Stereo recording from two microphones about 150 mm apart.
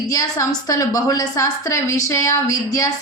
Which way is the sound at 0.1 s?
25° left (ahead or behind).